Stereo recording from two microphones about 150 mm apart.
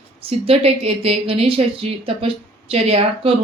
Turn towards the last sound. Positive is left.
turn(degrees=-40)  # may be behind; listen again after turning